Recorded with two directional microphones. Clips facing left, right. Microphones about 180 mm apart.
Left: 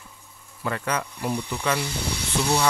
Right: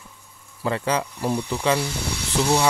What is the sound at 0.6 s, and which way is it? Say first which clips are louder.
Speech: right 4 dB; 30° right (ahead or behind).